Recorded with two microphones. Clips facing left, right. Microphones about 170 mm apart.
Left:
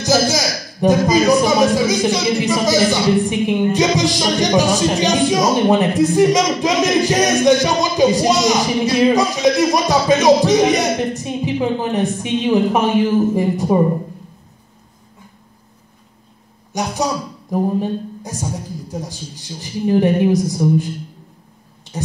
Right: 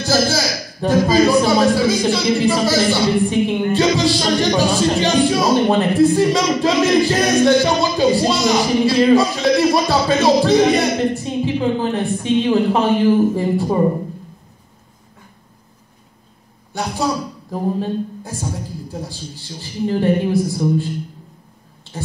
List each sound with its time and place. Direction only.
0.0 s a man's voice: 15° left (ahead or behind)
16.7 s a woman's voice: 20° left (ahead or behind)